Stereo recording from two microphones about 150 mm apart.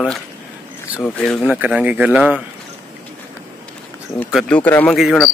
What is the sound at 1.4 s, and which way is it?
Speech, 10° right (ahead or behind).